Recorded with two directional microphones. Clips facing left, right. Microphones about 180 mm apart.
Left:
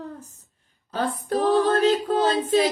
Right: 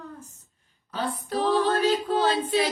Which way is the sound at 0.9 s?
50° left (ahead or behind).